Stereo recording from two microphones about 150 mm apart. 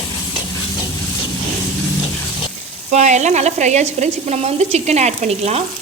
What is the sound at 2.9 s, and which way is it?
Speech, 50° right (ahead or behind).